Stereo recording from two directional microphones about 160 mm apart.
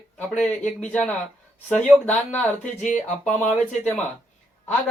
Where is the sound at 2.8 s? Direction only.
50° left (ahead or behind).